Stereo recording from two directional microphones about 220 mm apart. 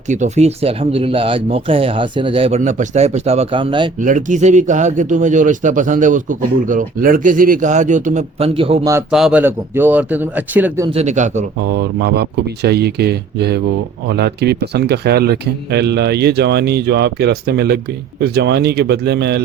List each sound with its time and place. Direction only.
0.1 s a man's voice: 30° right (ahead or behind)
4.0 s a man's voice: 35° right (ahead or behind)
8.9 s a man's voice: 5° right (ahead or behind)
10.9 s a man's voice: 30° right (ahead or behind)
11.7 s speech: 45° right (ahead or behind)